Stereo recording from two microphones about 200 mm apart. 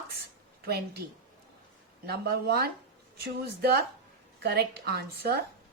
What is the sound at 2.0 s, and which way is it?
Speech, 50° right (ahead or behind).